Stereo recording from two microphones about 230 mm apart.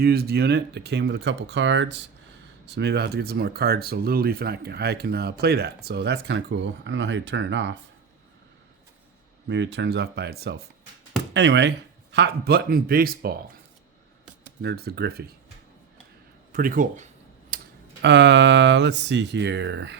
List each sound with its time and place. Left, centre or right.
0.0 s speech: right
9.5 s speech: right
14.6 s speech: right
16.5 s speech: right
17.5 s typing: right
18.0 s speech: right